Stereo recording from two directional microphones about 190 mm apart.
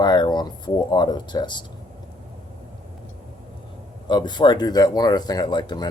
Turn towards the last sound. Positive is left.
turn(degrees=20)  # may be behind; listen again after turning